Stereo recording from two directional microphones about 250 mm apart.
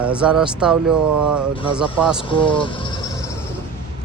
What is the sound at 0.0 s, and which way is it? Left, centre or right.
Speech, centre.